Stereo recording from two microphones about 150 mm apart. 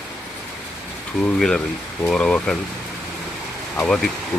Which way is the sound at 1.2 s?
5° left (ahead or behind).